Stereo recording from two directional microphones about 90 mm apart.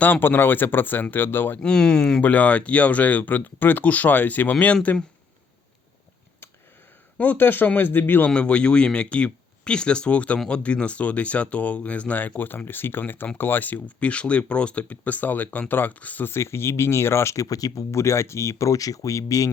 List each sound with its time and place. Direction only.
0.0 s speech: 20° left (ahead or behind)
1.6 s speech: 10° left (ahead or behind)
7.2 s speech: 20° left (ahead or behind); by 19.5 s 40° left (ahead or behind)